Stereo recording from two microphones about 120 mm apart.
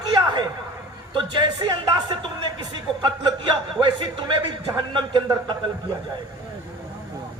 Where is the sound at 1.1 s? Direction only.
40° right (ahead or behind).